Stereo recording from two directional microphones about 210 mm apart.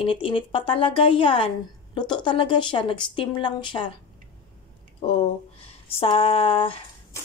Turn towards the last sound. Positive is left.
turn(degrees=25)  # may be behind; listen again after turning